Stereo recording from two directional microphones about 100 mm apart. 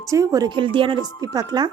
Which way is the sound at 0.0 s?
30° right (ahead or behind).